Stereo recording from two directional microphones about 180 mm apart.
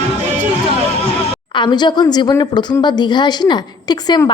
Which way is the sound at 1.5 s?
25° left (ahead or behind).